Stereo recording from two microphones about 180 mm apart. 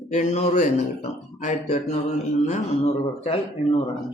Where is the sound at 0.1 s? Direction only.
40° left (ahead or behind).